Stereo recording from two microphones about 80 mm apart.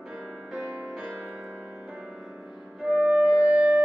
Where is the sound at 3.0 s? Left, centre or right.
Centre.